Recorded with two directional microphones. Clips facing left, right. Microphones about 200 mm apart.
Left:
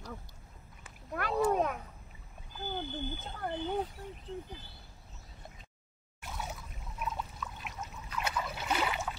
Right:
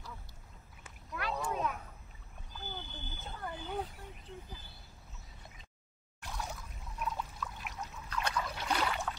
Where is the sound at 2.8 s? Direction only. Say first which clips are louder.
Left 10 dB; 60° left (ahead or behind).